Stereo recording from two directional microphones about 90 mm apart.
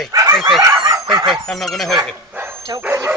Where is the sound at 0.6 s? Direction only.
35° right (ahead or behind).